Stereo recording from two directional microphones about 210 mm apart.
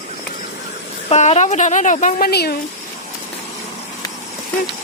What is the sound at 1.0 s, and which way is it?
Speech, 30° left (ahead or behind).